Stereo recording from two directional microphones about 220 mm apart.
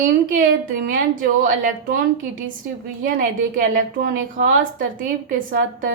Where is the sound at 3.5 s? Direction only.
40° right (ahead or behind).